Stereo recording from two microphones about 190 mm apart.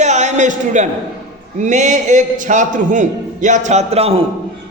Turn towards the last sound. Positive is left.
turn(degrees=-30)  # may be behind; listen again after turning